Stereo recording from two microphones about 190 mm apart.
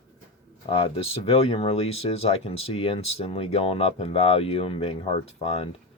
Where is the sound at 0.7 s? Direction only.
30° left (ahead or behind).